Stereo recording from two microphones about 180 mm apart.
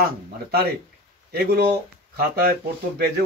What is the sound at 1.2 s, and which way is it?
Speech, 60° right (ahead or behind).